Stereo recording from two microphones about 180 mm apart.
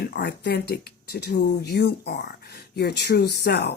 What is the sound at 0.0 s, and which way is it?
Speech, 65° left (ahead or behind).